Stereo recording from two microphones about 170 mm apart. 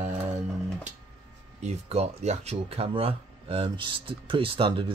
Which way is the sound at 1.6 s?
40° right (ahead or behind).